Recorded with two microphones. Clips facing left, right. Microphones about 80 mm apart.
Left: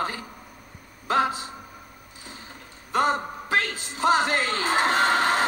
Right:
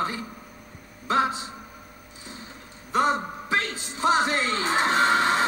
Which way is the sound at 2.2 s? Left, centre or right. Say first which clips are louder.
Right 1 dB; left.